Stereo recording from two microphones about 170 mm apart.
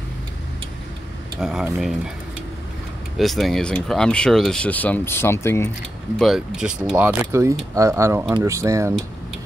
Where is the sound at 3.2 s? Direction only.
Centre (ahead or behind).